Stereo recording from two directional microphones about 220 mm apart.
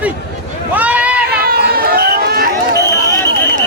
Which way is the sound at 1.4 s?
45° right (ahead or behind).